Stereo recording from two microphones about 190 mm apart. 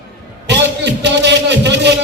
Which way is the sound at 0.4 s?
65° right (ahead or behind).